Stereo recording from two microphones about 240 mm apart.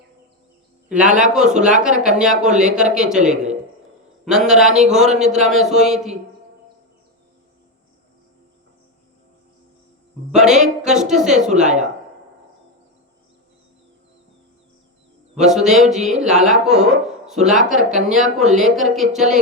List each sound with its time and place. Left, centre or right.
0.9 s speech: centre
10.3 s speech: centre
11.6 s speech: right
15.4 s speech: centre